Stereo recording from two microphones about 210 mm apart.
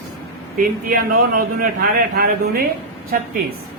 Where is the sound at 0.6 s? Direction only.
40° right (ahead or behind).